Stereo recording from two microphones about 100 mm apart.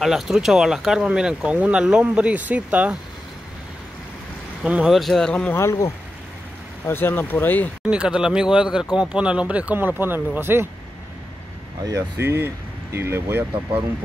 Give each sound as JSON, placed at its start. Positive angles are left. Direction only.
{"t": 0.0, "sound": "speech", "side_deg": -5}
{"t": 4.6, "sound": "speech", "side_deg": -10}
{"t": 4.9, "sound": "speech", "side_deg": 0}
{"t": 5.6, "sound": "speech", "side_deg": 30}
{"t": 6.9, "sound": "speech", "side_deg": 20}
{"t": 7.8, "sound": "speech", "side_deg": -10}
{"t": 12.2, "sound": "speech", "side_deg": -25}